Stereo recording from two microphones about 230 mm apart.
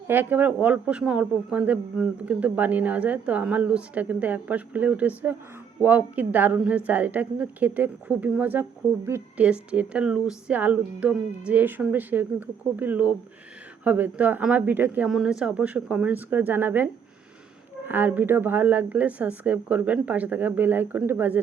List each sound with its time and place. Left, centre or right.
0.1 s speech: centre